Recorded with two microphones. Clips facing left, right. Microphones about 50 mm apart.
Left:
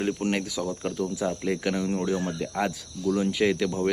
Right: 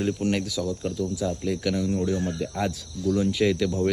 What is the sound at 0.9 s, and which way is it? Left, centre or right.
Speech, left.